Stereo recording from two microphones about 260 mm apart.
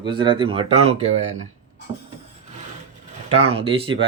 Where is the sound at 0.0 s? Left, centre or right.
Centre.